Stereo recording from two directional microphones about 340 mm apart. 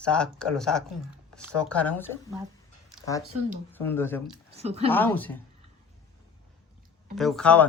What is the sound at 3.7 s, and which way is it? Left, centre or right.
Speech, centre.